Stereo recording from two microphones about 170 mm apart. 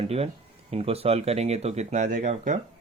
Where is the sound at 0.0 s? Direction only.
35° right (ahead or behind).